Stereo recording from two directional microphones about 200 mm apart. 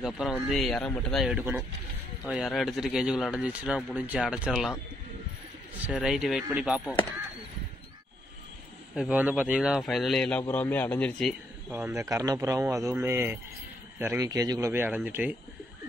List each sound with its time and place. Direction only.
0.0 s speech: centre (ahead or behind)
5.9 s speech: 5° right (ahead or behind)
8.9 s a man's voice: 5° right (ahead or behind)
11.7 s speech: 10° right (ahead or behind)